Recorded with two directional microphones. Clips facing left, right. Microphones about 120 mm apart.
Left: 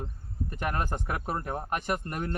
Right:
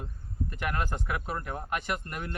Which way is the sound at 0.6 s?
35° left (ahead or behind).